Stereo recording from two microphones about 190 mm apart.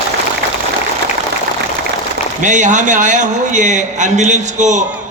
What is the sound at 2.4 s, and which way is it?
A man's voice, 40° right (ahead or behind).